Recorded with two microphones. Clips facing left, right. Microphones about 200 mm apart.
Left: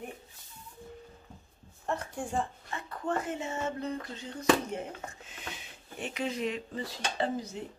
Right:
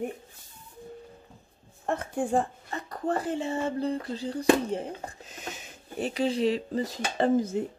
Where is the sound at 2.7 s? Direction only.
35° right (ahead or behind).